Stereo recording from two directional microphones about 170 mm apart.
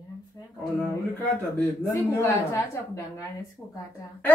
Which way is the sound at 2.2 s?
15° left (ahead or behind).